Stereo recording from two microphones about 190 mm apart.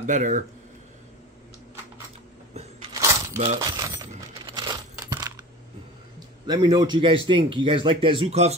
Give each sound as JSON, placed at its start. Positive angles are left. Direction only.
{"t": 0.0, "sound": "speech", "side_deg": -40}
{"t": 3.3, "sound": "coin", "side_deg": -25}
{"t": 6.1, "sound": "a man's voice", "side_deg": -20}